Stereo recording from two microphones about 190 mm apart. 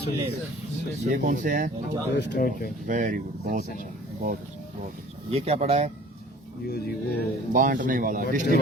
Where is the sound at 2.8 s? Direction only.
45° right (ahead or behind).